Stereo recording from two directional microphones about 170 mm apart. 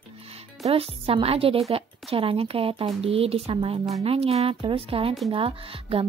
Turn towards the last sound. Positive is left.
turn(degrees=-30)  # may be behind; listen again after turning